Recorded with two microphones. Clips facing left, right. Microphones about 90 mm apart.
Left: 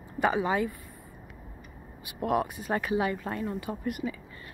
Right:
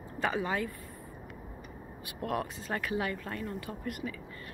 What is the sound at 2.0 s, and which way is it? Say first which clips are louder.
A woman's voice: left 6 dB; 15° left (ahead or behind).